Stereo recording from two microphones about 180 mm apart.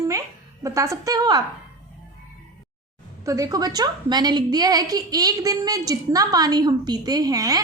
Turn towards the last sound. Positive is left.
turn(degrees=-20)  # may be behind; listen again after turning